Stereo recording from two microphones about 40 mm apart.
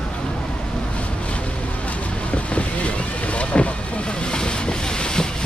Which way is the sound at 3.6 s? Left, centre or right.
Left.